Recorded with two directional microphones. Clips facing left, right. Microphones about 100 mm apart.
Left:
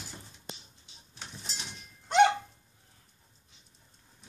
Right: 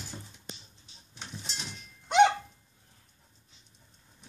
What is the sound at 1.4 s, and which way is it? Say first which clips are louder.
Goat: right 2 dB; centre (ahead or behind).